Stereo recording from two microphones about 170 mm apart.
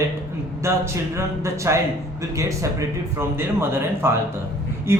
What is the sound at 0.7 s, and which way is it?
Speech, 15° right (ahead or behind).